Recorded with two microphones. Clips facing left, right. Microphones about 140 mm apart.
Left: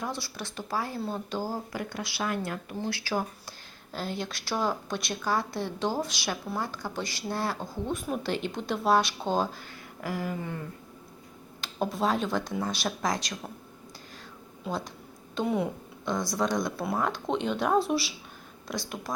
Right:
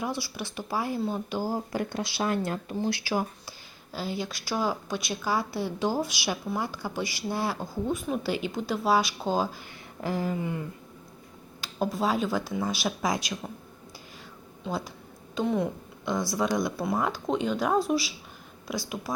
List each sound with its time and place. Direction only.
0.2 s a woman's voice: 10° right (ahead or behind)
1.7 s speech: 30° right (ahead or behind)
2.8 s a woman's voice: 15° right (ahead or behind)
10.0 s speech: 25° right (ahead or behind)
11.6 s speech: centre (ahead or behind)
14.6 s speech: 5° right (ahead or behind)
15.4 s speech: 5° left (ahead or behind)
16.3 s a woman's voice: 5° right (ahead or behind)